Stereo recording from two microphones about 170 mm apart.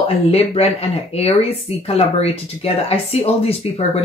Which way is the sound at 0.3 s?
35° left (ahead or behind).